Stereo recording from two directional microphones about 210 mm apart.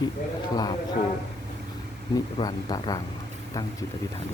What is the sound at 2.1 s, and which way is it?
Speech, 20° left (ahead or behind).